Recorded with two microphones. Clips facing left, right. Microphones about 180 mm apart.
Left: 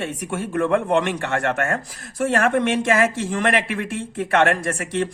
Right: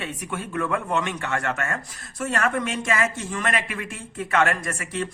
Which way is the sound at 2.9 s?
70° left (ahead or behind).